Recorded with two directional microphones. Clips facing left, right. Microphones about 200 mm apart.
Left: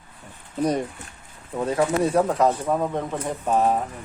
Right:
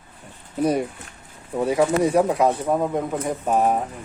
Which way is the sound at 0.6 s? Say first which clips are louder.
Right 2 dB; 10° right (ahead or behind).